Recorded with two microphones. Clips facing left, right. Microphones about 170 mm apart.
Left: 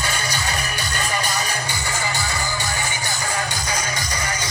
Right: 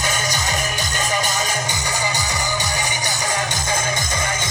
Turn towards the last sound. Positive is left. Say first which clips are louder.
# right 2 dB
turn(degrees=-25)  # may be behind; listen again after turning